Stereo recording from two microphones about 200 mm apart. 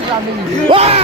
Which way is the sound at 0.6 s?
30° right (ahead or behind).